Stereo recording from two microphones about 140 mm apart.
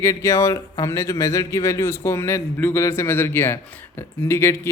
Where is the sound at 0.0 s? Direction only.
20° left (ahead or behind).